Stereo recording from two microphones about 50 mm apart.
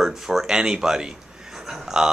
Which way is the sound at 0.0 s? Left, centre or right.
Centre.